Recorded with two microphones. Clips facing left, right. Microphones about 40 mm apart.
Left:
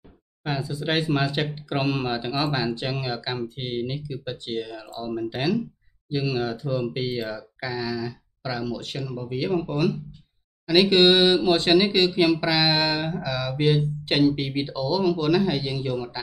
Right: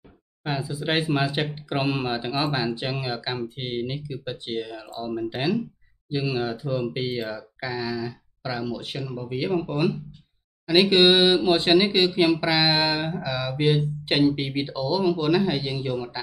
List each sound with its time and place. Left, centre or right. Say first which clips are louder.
0.4 s speech: even; centre